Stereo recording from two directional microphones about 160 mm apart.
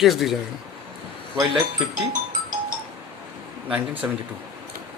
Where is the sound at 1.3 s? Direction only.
25° right (ahead or behind).